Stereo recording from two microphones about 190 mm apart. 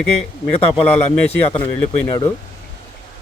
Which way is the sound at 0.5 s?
30° left (ahead or behind).